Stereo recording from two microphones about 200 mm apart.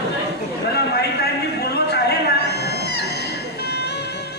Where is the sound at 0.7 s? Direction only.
55° left (ahead or behind).